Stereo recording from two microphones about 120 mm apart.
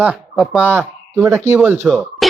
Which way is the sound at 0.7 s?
20° right (ahead or behind).